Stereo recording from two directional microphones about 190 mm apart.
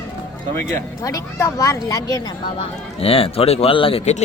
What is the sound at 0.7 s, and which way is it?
Speech, 15° left (ahead or behind).